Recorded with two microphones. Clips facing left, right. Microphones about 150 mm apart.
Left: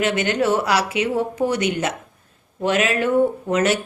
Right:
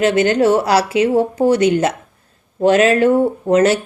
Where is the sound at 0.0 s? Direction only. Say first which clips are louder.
Right 7 dB; 35° right (ahead or behind).